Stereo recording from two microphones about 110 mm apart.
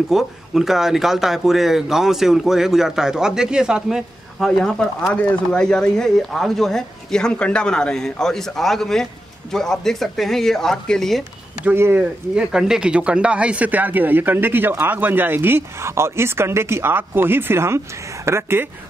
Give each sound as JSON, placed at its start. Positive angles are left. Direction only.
{"t": 0.1, "sound": "speech", "side_deg": -5}
{"t": 11.6, "sound": "speech", "side_deg": -20}
{"t": 12.0, "sound": "speech", "side_deg": -5}